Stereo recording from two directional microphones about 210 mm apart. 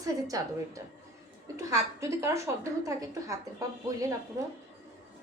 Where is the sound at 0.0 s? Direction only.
15° right (ahead or behind).